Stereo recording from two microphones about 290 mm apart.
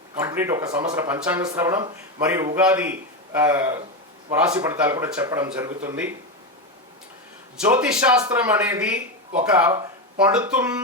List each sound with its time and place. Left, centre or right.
0.2 s speech: centre
7.6 s speech: centre